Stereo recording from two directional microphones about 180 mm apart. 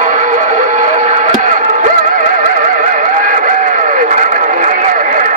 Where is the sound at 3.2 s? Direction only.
45° right (ahead or behind).